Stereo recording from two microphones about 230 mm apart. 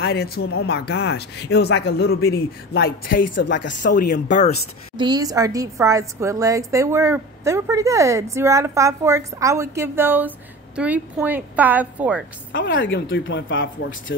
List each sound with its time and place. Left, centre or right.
0.0 s speech: left
3.3 s speech: left
3.8 s speech: left
4.9 s a woman's voice: centre
12.5 s speech: left